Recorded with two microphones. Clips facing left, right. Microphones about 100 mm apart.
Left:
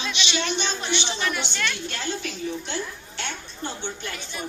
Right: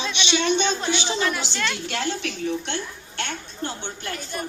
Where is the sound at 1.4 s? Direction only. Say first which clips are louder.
Right 2 dB; 90° right.